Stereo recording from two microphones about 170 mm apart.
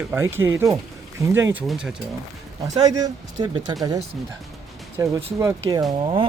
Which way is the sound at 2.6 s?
20° right (ahead or behind).